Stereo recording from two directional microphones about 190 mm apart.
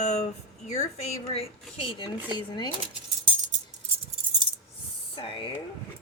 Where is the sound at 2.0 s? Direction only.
25° left (ahead or behind).